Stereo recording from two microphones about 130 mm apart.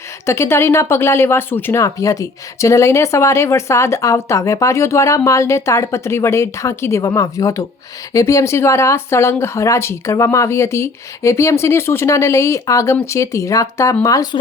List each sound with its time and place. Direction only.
0.3 s speech: 20° left (ahead or behind)